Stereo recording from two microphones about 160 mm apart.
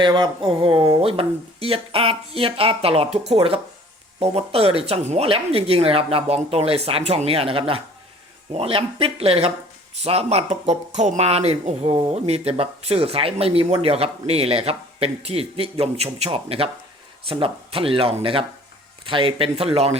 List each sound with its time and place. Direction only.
0.0 s speech: 30° right (ahead or behind)